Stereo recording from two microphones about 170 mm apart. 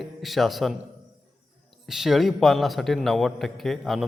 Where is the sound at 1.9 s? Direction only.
Centre (ahead or behind).